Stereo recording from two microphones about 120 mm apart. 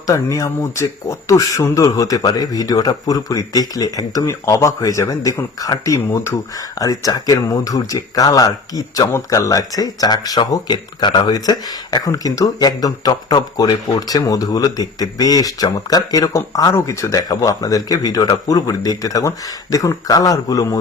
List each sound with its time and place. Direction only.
0.1 s speech: 30° left (ahead or behind)